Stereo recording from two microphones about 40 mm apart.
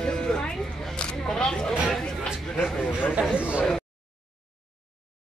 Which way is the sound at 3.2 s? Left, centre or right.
Right.